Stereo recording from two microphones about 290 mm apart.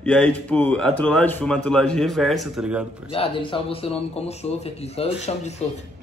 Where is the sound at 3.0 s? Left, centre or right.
Centre.